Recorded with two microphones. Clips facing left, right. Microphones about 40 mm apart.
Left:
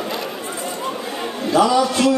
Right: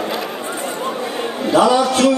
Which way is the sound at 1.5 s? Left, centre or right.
Right.